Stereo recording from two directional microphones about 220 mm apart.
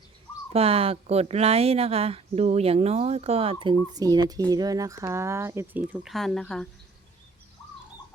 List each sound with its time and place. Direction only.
0.5 s speech: 25° right (ahead or behind); by 6.7 s centre (ahead or behind)